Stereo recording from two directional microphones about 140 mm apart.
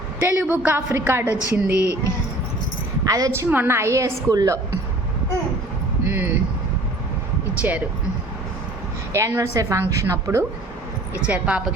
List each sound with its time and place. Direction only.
0.2 s a woman's voice: 15° right (ahead or behind)
3.1 s a woman's voice: 25° right (ahead or behind)
6.1 s a woman's voice: 10° right (ahead or behind)
7.6 s a woman's voice: 15° right (ahead or behind)
9.1 s a woman's voice: 20° right (ahead or behind)
11.2 s a woman's voice: 10° right (ahead or behind)